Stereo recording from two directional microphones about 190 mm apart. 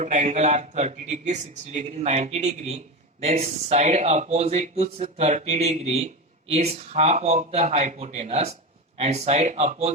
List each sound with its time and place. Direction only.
0.0 s speech: 40° right (ahead or behind)